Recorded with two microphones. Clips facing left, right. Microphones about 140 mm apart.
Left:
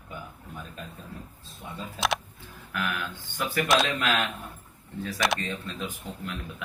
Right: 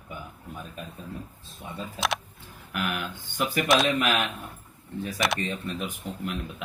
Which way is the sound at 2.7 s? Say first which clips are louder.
Right 1 dB; 20° right (ahead or behind).